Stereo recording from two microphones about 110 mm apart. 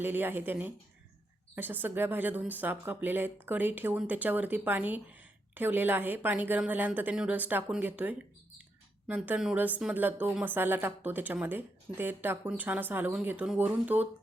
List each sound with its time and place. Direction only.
0.0 s a woman's voice: 20° right (ahead or behind)